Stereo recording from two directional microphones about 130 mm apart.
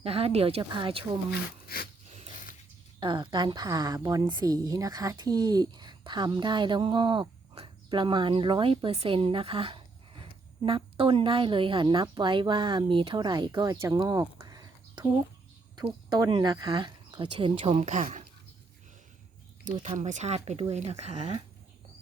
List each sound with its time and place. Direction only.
0.0 s a woman's voice: 50° right (ahead or behind)
0.6 s a woman's voice: 40° right (ahead or behind)
2.0 s a sound: 60° right (ahead or behind)
3.0 s a woman's voice: 40° right (ahead or behind)
14.0 s a sound: 30° right (ahead or behind)
16.0 s a woman's voice: 35° right (ahead or behind)
17.8 s speech: 65° right (ahead or behind)
19.8 s speech: 60° right (ahead or behind)